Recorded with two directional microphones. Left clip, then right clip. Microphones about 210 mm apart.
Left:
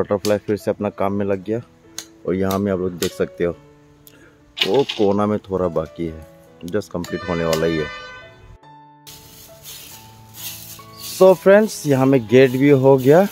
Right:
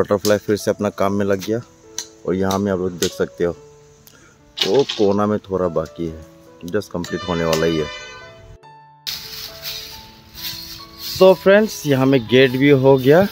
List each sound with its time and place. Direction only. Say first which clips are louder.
0.0 s speech: right 2 dB; 5° right (ahead or behind)
2.0 s music: right 4 dB; 15° left (ahead or behind)
2.5 s speech: right 1 dB; centre (ahead or behind)
4.6 s speech: right 1 dB; centre (ahead or behind)
11.1 s speech: even; 5° left (ahead or behind)